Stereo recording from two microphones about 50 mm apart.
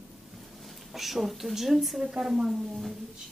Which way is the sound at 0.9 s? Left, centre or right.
Centre.